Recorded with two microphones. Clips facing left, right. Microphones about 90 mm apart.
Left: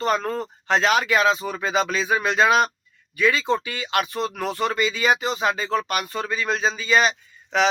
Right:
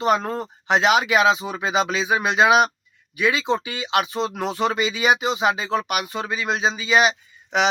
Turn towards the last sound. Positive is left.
turn(degrees=-15)  # may be behind; listen again after turning